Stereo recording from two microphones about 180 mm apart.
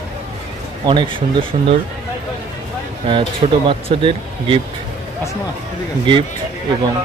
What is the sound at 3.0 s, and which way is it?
Speech, 25° right (ahead or behind).